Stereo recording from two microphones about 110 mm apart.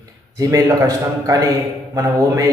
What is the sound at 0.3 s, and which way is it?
A man's voice, 30° right (ahead or behind).